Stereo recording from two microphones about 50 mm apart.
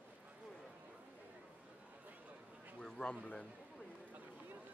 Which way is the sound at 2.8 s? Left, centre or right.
Centre.